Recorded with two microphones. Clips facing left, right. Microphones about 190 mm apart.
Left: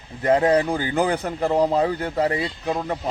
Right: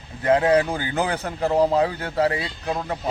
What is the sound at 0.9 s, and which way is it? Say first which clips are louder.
Speech: left 3 dB; 15° left (ahead or behind).